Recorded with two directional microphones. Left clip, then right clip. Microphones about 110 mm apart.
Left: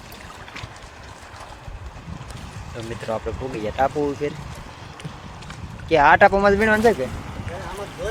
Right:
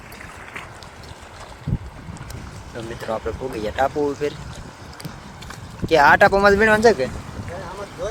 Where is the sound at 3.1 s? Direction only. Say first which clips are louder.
Right 1 dB; 20° right (ahead or behind).